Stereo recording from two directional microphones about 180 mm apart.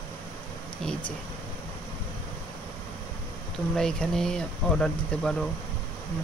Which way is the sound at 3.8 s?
5° left (ahead or behind).